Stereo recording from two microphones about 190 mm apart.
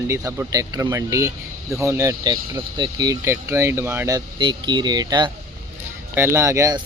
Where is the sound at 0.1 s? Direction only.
15° right (ahead or behind).